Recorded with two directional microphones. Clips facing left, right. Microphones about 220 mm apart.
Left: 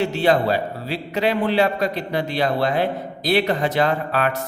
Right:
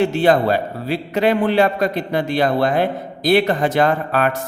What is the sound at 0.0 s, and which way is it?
A man's voice, 50° right (ahead or behind).